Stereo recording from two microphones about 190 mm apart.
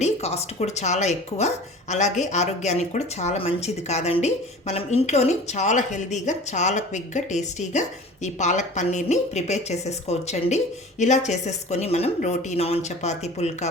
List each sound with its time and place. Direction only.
0.0 s speech: 35° left (ahead or behind)